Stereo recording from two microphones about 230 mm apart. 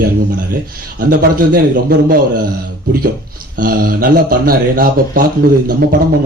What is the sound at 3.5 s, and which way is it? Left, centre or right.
A man's voice, right.